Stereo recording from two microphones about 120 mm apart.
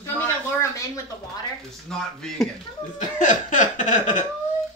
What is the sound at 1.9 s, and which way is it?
Speech, 5° left (ahead or behind).